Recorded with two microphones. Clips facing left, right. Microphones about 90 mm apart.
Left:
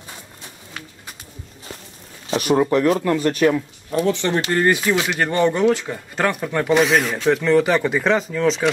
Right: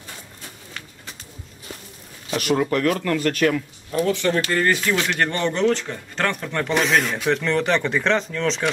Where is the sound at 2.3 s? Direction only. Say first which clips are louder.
Left 4 dB; 25° left (ahead or behind).